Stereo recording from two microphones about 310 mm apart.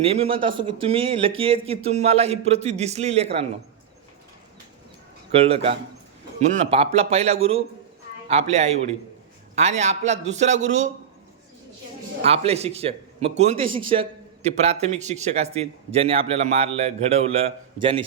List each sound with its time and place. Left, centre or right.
0.0 s a man's voice: centre
5.3 s a man's voice: centre
12.2 s a man's voice: centre